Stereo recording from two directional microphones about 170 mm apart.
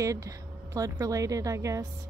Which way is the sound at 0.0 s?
20° right (ahead or behind).